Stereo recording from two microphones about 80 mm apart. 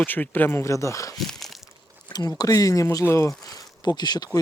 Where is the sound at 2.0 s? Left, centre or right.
Left.